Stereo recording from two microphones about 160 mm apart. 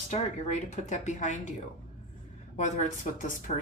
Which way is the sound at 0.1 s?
45° left (ahead or behind).